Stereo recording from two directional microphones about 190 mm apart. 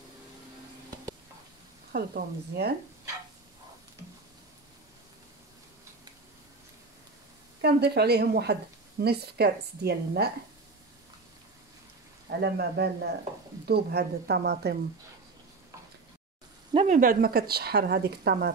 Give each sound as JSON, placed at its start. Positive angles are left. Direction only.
{"t": 1.9, "sound": "speech", "side_deg": -55}
{"t": 7.6, "sound": "speech", "side_deg": -60}
{"t": 12.3, "sound": "speech", "side_deg": -60}
{"t": 16.7, "sound": "speech", "side_deg": -40}